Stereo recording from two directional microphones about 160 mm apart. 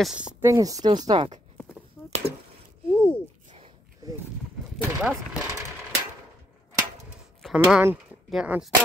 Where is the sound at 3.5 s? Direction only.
30° right (ahead or behind).